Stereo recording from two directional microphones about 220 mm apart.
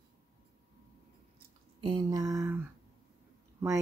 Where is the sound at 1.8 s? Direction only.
20° right (ahead or behind).